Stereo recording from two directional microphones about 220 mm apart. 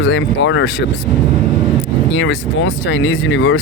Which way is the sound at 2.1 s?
55° left (ahead or behind).